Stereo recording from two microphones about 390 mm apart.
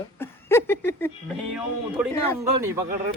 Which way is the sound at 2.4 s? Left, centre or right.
Centre.